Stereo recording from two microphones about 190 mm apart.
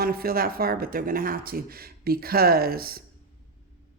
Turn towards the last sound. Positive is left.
turn(degrees=-50)  # may be behind; listen again after turning